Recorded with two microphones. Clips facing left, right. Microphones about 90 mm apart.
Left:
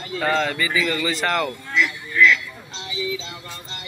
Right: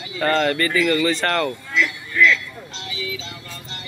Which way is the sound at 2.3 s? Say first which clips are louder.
Even; 20° left (ahead or behind).